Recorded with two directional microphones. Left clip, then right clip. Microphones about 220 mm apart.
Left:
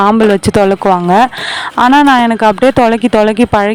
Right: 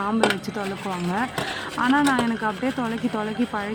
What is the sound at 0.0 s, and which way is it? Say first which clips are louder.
Speech: left 14 dB; 45° left (ahead or behind).